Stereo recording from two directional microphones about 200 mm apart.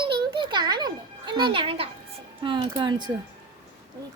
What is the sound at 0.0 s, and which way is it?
Music, 25° right (ahead or behind).